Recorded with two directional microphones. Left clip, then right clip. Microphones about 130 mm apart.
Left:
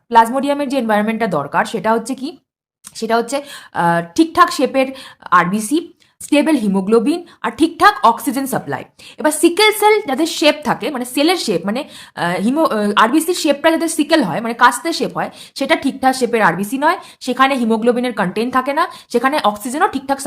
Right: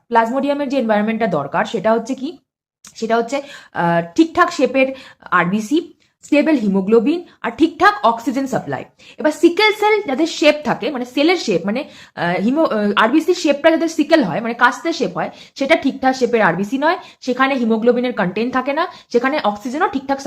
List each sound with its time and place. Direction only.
0.1 s a woman's voice: 35° left (ahead or behind)
17.2 s a woman's voice: 35° left (ahead or behind)